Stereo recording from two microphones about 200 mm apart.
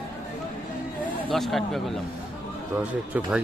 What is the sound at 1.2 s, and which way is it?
Speech, centre (ahead or behind).